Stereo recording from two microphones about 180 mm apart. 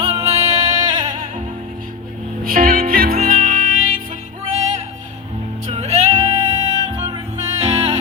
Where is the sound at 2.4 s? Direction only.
50° right (ahead or behind).